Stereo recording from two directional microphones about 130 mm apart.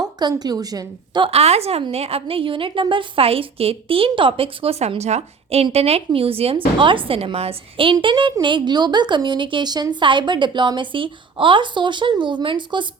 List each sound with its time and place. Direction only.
0.0 s a woman's voice: 30° right (ahead or behind)
1.3 s a woman's voice: 55° right (ahead or behind)